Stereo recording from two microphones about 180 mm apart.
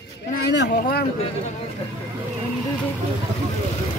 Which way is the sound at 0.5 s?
70° left (ahead or behind).